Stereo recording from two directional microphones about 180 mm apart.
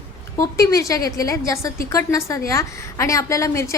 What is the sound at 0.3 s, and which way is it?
A woman's voice, 20° left (ahead or behind).